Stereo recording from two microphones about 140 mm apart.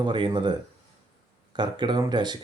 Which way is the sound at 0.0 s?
35° right (ahead or behind).